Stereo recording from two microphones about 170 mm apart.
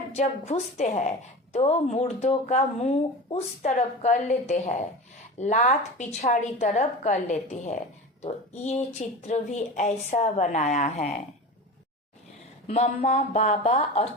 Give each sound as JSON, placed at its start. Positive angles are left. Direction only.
{"t": 0.1, "sound": "speech", "side_deg": 40}
{"t": 12.6, "sound": "speech", "side_deg": 40}